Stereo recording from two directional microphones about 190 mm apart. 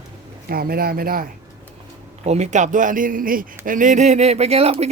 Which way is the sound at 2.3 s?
35° right (ahead or behind).